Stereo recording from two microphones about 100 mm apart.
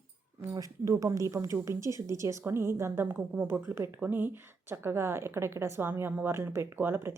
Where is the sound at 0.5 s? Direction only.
35° right (ahead or behind).